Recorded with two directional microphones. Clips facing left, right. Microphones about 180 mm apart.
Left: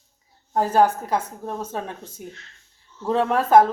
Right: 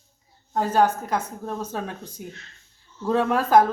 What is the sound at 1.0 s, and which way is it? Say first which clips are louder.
A woman's voice: left 2 dB; 25° left (ahead or behind).